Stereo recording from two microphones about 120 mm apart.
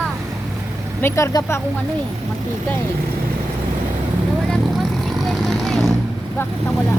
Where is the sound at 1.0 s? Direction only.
20° left (ahead or behind).